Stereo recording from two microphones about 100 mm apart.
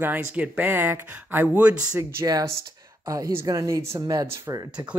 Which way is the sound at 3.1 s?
30° right (ahead or behind).